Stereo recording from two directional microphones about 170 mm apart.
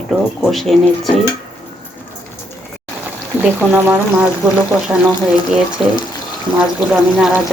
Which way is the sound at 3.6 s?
10° right (ahead or behind).